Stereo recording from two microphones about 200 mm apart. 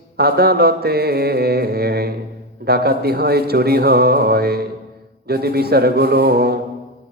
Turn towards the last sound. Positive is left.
turn(degrees=-50)  # may be behind; listen again after turning